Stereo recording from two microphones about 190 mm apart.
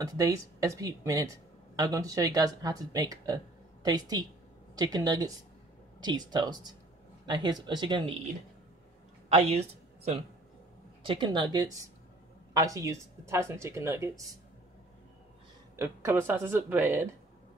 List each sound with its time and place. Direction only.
0.0 s speech: 20° right (ahead or behind)
9.3 s speech: 35° right (ahead or behind); by 14.2 s 15° right (ahead or behind)
15.7 s speech: 15° right (ahead or behind)